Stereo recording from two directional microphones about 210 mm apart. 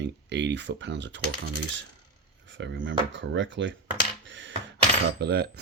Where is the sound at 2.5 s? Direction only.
60° right (ahead or behind).